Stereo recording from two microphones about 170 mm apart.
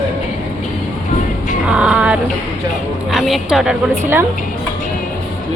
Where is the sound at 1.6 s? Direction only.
5° right (ahead or behind).